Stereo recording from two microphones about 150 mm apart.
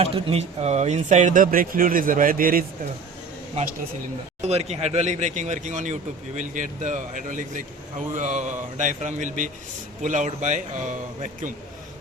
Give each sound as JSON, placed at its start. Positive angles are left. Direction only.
{"t": 0.0, "sound": "speech", "side_deg": -40}
{"t": 3.5, "sound": "speech", "side_deg": -50}